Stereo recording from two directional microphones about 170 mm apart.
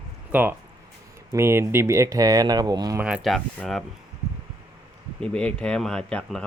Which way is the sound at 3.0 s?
5° right (ahead or behind).